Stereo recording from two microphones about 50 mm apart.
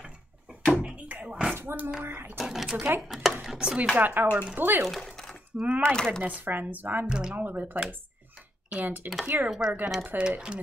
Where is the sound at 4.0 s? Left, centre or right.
Right.